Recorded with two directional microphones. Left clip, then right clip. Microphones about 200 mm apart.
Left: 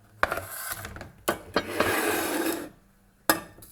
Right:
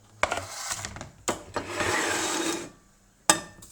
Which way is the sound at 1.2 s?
55° left (ahead or behind).